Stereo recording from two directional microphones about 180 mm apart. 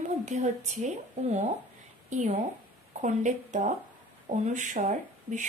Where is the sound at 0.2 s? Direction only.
40° right (ahead or behind).